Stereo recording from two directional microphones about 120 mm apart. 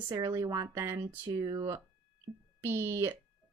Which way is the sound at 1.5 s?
30° right (ahead or behind).